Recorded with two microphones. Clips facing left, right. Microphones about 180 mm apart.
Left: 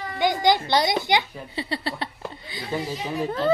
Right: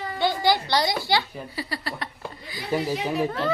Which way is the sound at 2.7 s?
15° right (ahead or behind).